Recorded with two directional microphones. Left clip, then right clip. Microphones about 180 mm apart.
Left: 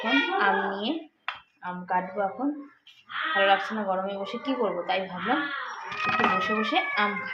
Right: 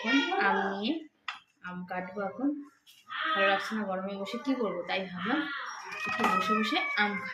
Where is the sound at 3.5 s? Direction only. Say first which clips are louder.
Left 6 dB; 20° right (ahead or behind).